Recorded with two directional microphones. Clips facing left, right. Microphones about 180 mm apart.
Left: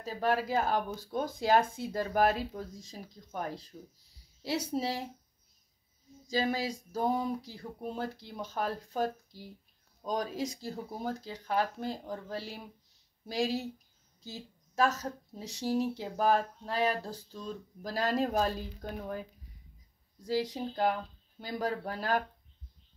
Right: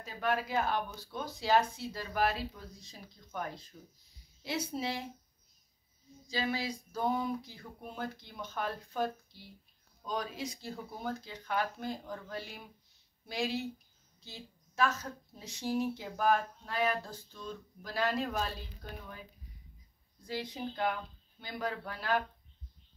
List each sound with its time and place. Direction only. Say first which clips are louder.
0.0 s speech: left 3 dB; 35° left (ahead or behind)
3.3 s speech: left 2 dB; 35° left (ahead or behind)
6.2 s speech: left 4 dB; 45° left (ahead or behind)
20.2 s speech: left 6 dB; 40° left (ahead or behind)